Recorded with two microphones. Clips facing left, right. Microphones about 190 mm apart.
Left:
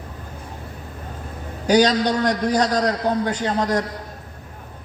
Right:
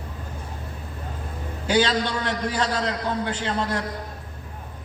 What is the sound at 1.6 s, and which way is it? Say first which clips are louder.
A man's voice: left 5 dB; 40° left (ahead or behind).